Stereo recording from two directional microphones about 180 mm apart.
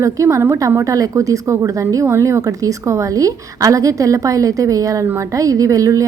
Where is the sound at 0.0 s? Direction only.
15° right (ahead or behind).